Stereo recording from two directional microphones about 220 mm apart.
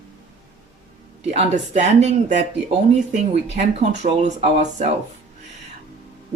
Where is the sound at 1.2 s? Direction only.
30° right (ahead or behind).